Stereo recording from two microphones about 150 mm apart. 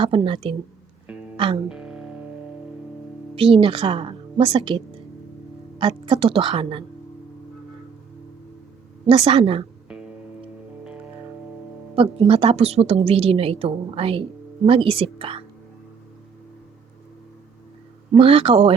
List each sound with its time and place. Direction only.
0.0 s a woman's voice: 40° right (ahead or behind)
1.6 s music: 5° right (ahead or behind)
3.3 s a woman's voice: 35° right (ahead or behind)
5.8 s a woman's voice: 35° right (ahead or behind)
9.0 s a woman's voice: 40° right (ahead or behind)
9.9 s music: 5° right (ahead or behind)
11.9 s a woman's voice: 40° right (ahead or behind)
18.2 s a woman's voice: 40° right (ahead or behind)